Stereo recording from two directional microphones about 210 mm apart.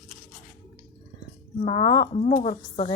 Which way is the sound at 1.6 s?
25° left (ahead or behind).